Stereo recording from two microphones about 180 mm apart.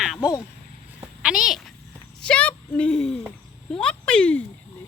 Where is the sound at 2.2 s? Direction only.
5° left (ahead or behind).